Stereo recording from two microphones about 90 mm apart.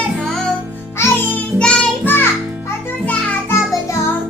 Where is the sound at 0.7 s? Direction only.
25° left (ahead or behind); by 2.0 s 10° left (ahead or behind).